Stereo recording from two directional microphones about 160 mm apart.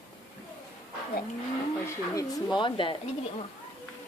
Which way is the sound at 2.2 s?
25° left (ahead or behind).